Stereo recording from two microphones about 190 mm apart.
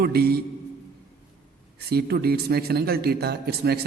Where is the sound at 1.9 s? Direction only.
55° right (ahead or behind).